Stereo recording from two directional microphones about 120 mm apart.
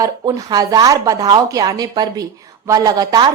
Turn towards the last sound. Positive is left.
turn(degrees=-35)  # may be behind; listen again after turning